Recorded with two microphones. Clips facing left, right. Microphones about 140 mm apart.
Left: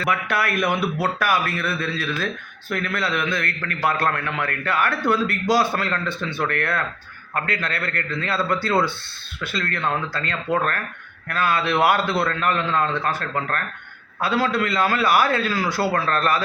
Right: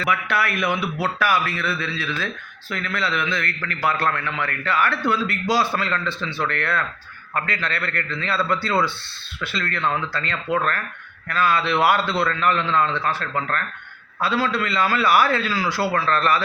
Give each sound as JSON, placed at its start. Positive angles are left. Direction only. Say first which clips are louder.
{"t": 0.0, "sound": "a man's voice", "louder": "even", "side_deg": 45}